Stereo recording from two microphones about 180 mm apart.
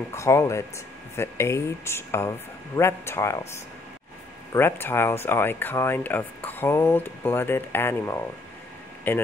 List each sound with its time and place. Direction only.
0.1 s speech: 15° left (ahead or behind)
4.5 s speech: 15° left (ahead or behind)